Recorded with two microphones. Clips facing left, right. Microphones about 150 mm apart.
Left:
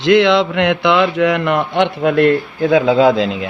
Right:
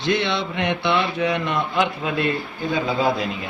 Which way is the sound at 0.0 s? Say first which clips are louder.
Left 11 dB; 90° left.